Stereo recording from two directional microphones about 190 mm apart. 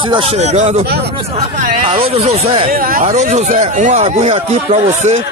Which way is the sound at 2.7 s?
50° right (ahead or behind).